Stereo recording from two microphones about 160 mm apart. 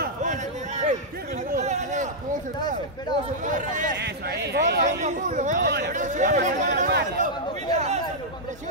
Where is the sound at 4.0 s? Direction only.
90° right.